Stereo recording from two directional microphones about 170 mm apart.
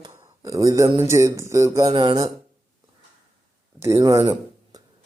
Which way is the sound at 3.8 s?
15° right (ahead or behind).